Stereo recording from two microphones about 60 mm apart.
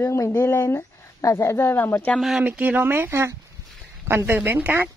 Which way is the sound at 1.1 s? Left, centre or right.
Left.